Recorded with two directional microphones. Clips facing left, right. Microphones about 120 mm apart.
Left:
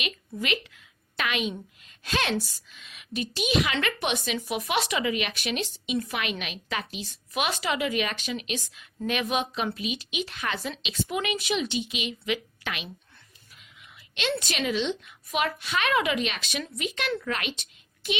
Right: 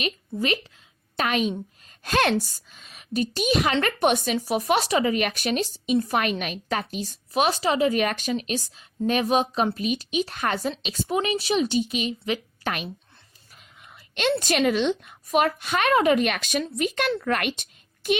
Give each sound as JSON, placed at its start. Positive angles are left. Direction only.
{"t": 0.0, "sound": "a woman's voice", "side_deg": -35}